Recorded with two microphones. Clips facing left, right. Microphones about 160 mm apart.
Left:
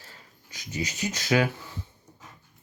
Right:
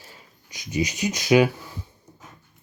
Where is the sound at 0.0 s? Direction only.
15° right (ahead or behind).